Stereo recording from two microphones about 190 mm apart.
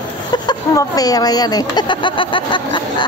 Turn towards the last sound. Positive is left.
turn(degrees=25)  # may be behind; listen again after turning